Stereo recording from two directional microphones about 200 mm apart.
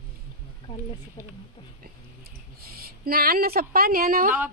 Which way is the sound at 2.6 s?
50° right (ahead or behind).